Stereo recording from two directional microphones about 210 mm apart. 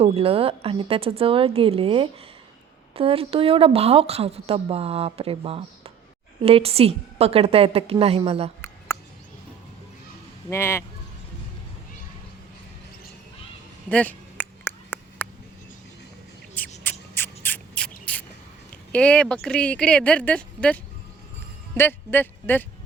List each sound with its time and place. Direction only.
0.0 s a woman's voice: 25° right (ahead or behind)
8.9 s a sound: 10° left (ahead or behind)
10.5 s speech: 10° left (ahead or behind)
13.9 s a sound: 5° left (ahead or behind)
16.8 s rodents: 10° left (ahead or behind)
18.9 s speech: 5° left (ahead or behind)